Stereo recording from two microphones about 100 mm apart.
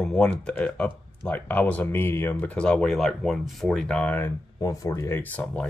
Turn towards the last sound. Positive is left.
turn(degrees=15)  # may be behind; listen again after turning